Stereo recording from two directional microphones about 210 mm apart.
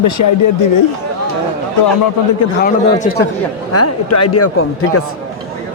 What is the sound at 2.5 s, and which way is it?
Speech, 45° left (ahead or behind).